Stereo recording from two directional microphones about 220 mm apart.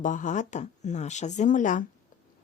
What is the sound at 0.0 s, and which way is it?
A woman's voice, 35° left (ahead or behind).